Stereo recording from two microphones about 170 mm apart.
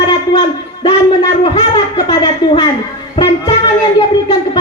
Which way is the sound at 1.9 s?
30° left (ahead or behind).